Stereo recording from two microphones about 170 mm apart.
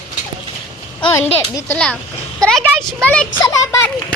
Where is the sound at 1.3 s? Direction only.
10° left (ahead or behind).